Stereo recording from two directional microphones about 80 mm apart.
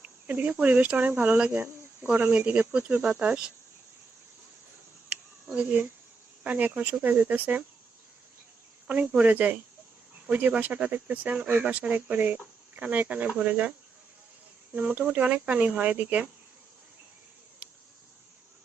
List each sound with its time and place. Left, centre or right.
0.0 s speech: right
5.5 s speech: right
8.9 s speech: centre
14.8 s speech: centre
17.6 s insect: centre